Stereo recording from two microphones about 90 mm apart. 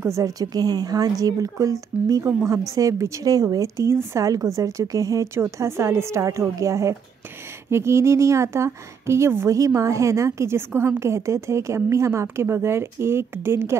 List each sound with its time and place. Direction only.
0.0 s a woman's voice: 35° right (ahead or behind)